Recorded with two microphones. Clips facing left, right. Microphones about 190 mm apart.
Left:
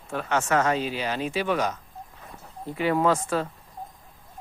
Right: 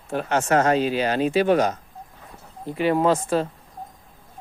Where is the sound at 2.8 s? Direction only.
25° right (ahead or behind).